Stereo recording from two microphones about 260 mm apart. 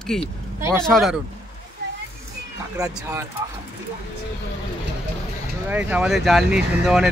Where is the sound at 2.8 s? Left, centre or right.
Centre.